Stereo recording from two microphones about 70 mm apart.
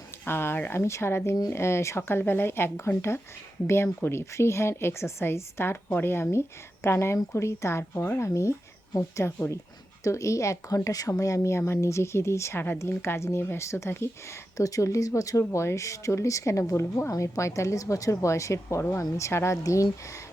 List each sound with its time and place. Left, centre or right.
0.3 s speech: left
4.0 s speech: left
13.0 s speech: left
14.5 s speech: left